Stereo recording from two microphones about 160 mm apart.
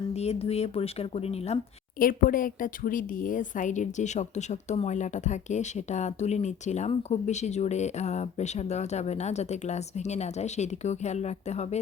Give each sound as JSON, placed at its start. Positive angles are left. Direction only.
{"t": 0.1, "sound": "speech", "side_deg": 40}
{"t": 2.0, "sound": "a woman's voice", "side_deg": 60}